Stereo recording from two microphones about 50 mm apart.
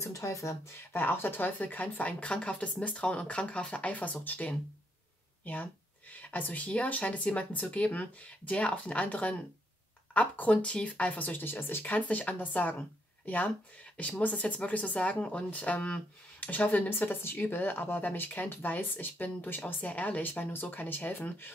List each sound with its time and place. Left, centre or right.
0.0 s speech: left
0.9 s a woman's voice: left
11.8 s speech: left